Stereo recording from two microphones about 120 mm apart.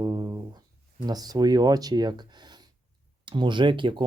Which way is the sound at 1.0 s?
35° right (ahead or behind).